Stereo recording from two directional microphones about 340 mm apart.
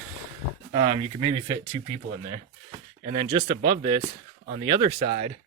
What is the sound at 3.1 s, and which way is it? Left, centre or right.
Speech, centre.